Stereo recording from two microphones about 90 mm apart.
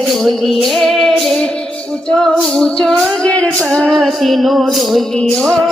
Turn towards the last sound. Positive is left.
turn(degrees=10)  # may be behind; listen again after turning